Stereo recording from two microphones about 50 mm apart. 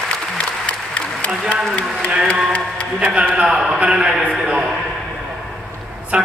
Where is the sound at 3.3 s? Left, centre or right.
Centre.